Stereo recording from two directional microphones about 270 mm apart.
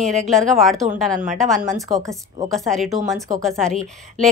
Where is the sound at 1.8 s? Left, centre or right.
Centre.